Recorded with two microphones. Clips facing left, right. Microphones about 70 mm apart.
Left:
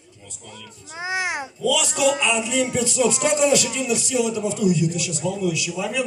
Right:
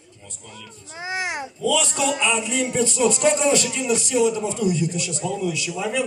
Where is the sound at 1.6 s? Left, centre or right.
Right.